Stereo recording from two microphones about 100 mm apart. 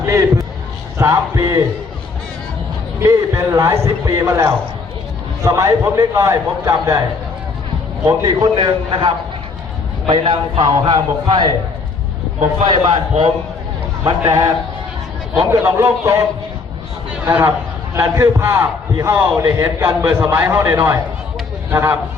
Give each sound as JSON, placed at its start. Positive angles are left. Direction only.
{"t": 0.0, "sound": "a sound", "side_deg": -30}
{"t": 0.9, "sound": "a man's voice", "side_deg": -30}
{"t": 3.0, "sound": "a man's voice", "side_deg": -30}
{"t": 8.0, "sound": "a man's voice", "side_deg": -40}
{"t": 12.8, "sound": "a man's voice", "side_deg": -45}
{"t": 14.3, "sound": "a man's voice", "side_deg": -35}
{"t": 17.2, "sound": "a man's voice", "side_deg": -25}